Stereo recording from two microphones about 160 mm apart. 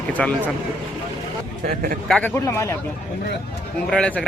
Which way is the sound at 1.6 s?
60° right (ahead or behind).